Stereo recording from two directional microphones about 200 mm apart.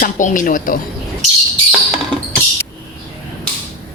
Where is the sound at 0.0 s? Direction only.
40° left (ahead or behind).